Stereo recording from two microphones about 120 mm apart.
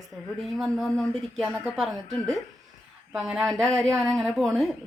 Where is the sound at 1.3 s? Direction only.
Centre (ahead or behind).